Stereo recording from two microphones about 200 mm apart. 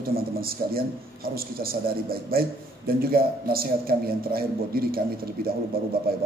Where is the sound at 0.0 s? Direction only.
50° right (ahead or behind).